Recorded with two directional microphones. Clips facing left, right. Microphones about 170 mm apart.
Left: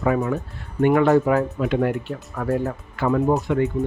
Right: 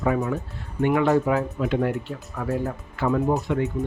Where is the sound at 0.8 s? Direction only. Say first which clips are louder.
Left 4 dB; 50° left (ahead or behind).